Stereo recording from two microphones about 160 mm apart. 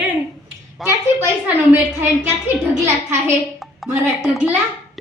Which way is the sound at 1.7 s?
10° right (ahead or behind).